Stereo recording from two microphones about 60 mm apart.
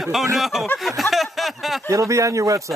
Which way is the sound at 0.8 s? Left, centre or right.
Centre.